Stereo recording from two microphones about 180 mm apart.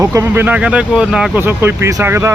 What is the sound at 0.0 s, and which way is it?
Speech, 15° right (ahead or behind).